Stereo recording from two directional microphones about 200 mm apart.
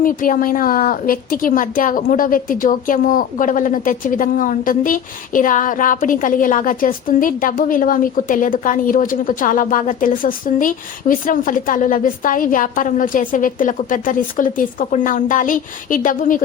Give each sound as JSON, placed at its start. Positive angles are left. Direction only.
{"t": 0.0, "sound": "a woman's voice", "side_deg": 45}